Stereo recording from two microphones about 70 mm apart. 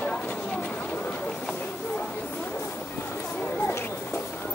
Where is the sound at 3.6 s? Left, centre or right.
Left.